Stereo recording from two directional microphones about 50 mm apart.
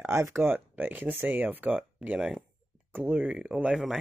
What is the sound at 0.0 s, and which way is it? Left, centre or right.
Speech, right.